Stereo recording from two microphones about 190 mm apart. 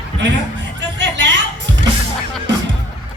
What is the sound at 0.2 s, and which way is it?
Music, 70° right (ahead or behind).